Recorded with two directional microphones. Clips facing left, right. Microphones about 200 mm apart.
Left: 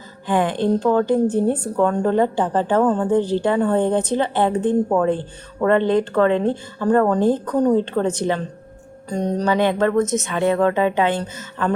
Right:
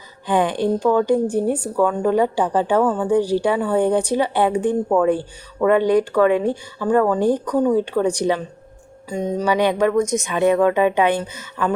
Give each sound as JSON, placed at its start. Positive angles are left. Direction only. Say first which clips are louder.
{"t": 0.3, "sound": "a woman's voice", "louder": "even", "side_deg": -15}
{"t": 4.9, "sound": "speech", "louder": "right 4 dB", "side_deg": 20}
{"t": 5.6, "sound": "a woman's voice", "louder": "right 1 dB", "side_deg": -10}